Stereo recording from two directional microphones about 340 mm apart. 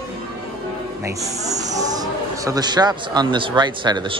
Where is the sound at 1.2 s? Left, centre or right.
Centre.